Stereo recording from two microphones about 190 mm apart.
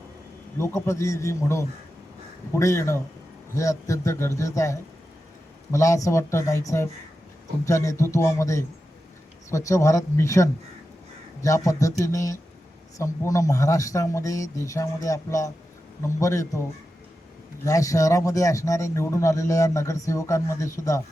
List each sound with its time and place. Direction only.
0.6 s speech: 15° left (ahead or behind)
17.7 s speech: 15° left (ahead or behind)